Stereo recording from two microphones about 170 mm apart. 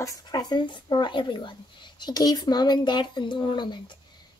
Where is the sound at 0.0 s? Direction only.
20° left (ahead or behind).